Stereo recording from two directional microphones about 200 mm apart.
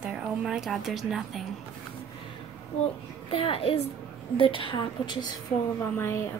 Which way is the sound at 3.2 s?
25° left (ahead or behind).